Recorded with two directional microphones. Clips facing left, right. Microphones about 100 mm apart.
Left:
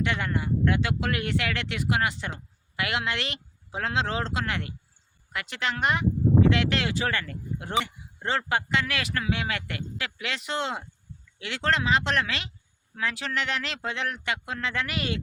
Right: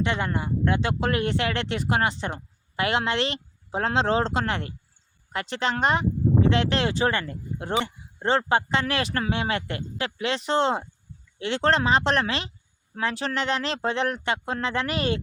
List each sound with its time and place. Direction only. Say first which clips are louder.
0.0 s speech: right 2 dB; 25° right (ahead or behind)